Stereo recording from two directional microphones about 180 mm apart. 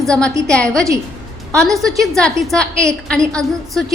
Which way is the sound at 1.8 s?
Centre (ahead or behind).